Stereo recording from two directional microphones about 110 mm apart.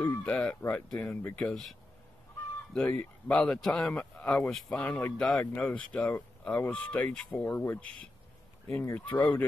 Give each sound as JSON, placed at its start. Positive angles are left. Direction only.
{"t": 0.0, "sound": "speech", "side_deg": 10}